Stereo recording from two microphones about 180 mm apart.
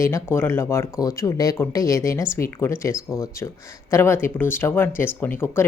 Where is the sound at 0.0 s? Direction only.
15° left (ahead or behind).